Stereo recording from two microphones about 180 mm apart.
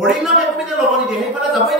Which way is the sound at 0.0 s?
Centre (ahead or behind).